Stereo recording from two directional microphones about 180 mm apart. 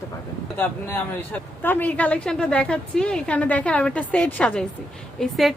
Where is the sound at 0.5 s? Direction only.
10° left (ahead or behind).